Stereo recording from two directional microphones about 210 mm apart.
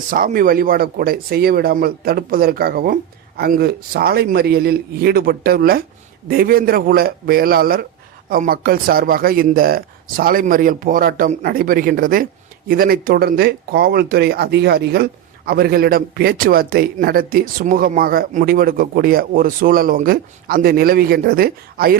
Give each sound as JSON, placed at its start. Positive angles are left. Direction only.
{"t": 0.1, "sound": "speech", "side_deg": -40}